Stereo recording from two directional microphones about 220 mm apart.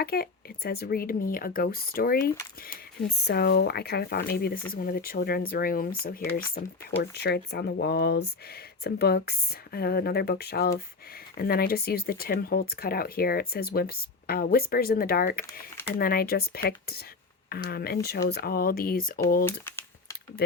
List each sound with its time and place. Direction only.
0.0 s speech: 45° left (ahead or behind)